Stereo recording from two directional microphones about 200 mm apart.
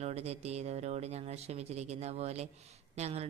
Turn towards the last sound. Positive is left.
turn(degrees=-35)  # may be behind; listen again after turning